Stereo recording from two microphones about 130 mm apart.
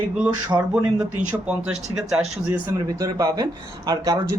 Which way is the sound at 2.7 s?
30° right (ahead or behind).